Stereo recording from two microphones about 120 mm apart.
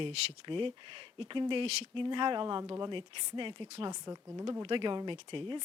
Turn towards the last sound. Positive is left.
turn(degrees=-45)  # may be behind; listen again after turning